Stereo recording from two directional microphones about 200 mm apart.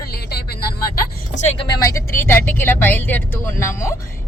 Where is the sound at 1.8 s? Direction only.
15° left (ahead or behind).